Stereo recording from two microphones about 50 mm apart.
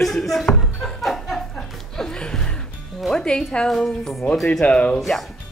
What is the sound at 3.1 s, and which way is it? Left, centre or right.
Music, centre.